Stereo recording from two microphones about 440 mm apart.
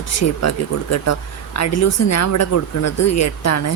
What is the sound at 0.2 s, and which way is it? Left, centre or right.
Speech, left.